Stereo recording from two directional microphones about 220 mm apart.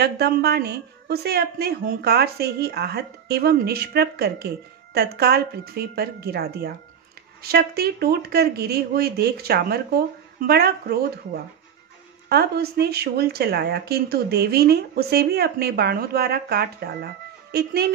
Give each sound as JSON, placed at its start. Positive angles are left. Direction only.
{"t": 0.0, "sound": "speech", "side_deg": -45}